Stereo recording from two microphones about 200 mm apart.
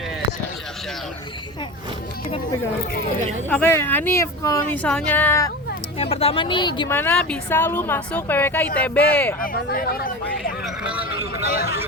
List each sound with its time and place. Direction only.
3.5 s a woman's voice: 10° left (ahead or behind)
6.0 s speech: 30° left (ahead or behind)
6.9 s a woman's voice: 10° left (ahead or behind)
9.4 s speech: 45° left (ahead or behind)
10.6 s vehicle: 5° right (ahead or behind)